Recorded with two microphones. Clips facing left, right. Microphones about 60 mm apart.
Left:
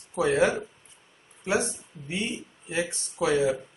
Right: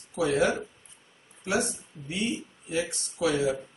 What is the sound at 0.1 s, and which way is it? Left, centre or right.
Speech, left.